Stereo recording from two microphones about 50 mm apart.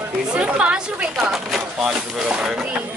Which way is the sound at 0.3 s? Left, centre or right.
Right.